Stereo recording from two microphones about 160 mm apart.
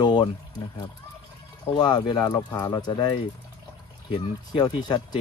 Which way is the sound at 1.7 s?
25° left (ahead or behind).